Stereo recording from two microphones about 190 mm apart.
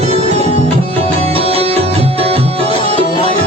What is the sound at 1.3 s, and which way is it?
Music, 30° right (ahead or behind).